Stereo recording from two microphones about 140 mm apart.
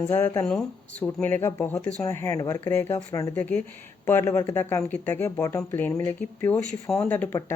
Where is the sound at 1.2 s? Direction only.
20° left (ahead or behind).